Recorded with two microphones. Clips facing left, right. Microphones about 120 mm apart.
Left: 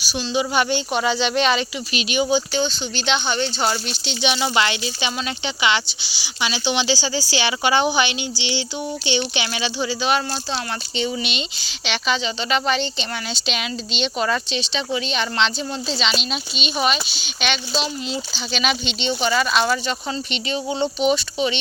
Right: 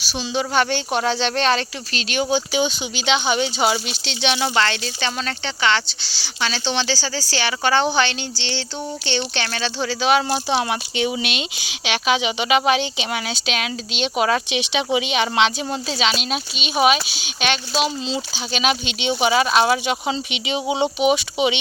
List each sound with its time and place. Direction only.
0.0 s speech: centre (ahead or behind)
2.5 s speech: 10° right (ahead or behind); by 9.9 s 10° left (ahead or behind)
10.0 s speech: centre (ahead or behind)
10.3 s speech: 15° right (ahead or behind)
14.5 s speech: 15° right (ahead or behind)
15.2 s speech: 55° right (ahead or behind)
15.9 s speech: 5° right (ahead or behind)